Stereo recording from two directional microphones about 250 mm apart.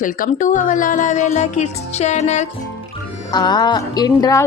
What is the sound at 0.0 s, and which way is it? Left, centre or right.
Speech, left.